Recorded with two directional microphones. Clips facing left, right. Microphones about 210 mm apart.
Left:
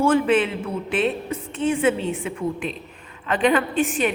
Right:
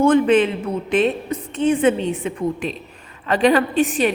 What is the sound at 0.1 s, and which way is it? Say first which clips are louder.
A woman's voice: right 4 dB; 35° right (ahead or behind).